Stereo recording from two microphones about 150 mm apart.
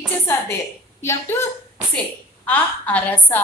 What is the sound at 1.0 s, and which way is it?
A woman's voice, 20° left (ahead or behind).